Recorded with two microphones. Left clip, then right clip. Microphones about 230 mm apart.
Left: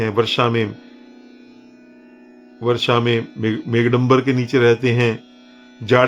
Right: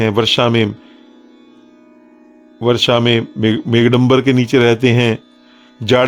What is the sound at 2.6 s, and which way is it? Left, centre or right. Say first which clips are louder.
Speech: right 5 dB; right.